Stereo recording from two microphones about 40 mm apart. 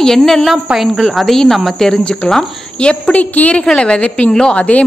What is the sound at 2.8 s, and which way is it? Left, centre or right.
Speech, left.